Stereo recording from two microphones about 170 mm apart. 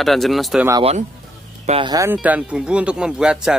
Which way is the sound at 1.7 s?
30° right (ahead or behind).